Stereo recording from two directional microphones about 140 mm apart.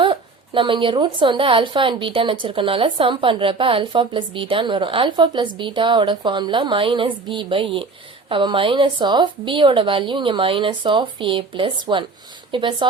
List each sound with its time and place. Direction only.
0.0 s a woman's voice: 35° right (ahead or behind)